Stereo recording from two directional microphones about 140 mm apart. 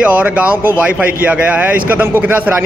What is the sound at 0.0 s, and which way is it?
Speech, 10° right (ahead or behind).